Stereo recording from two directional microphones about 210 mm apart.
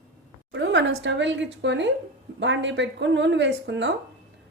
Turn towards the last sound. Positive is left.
turn(degrees=-55)  # may be behind; listen again after turning